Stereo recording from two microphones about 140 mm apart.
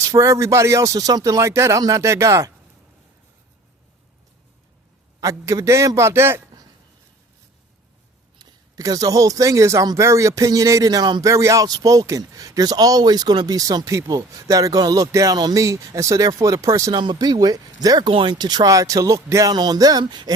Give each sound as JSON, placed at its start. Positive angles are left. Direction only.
{"t": 0.0, "sound": "speech", "side_deg": -20}
{"t": 5.2, "sound": "speech", "side_deg": -25}
{"t": 8.4, "sound": "speech", "side_deg": -25}